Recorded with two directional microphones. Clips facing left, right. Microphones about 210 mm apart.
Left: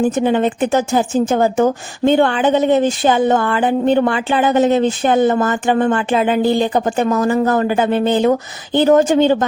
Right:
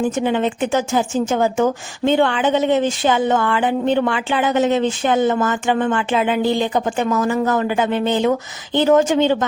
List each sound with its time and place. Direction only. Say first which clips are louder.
0.2 s a woman's voice: left 3 dB; 45° left (ahead or behind)